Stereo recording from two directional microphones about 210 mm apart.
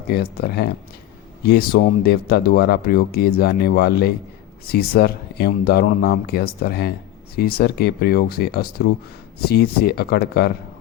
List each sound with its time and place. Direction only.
0.1 s speech: 50° left (ahead or behind)